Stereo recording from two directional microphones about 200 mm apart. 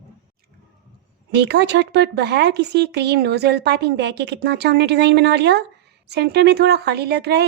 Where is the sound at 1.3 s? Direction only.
60° right (ahead or behind).